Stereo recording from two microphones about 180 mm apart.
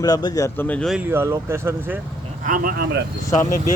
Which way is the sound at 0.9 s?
10° right (ahead or behind).